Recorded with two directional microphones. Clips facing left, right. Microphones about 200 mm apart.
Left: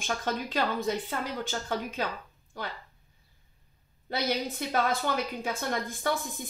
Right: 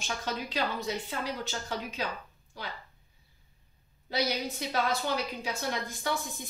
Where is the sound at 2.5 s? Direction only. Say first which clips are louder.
Left 4 dB; 50° left (ahead or behind).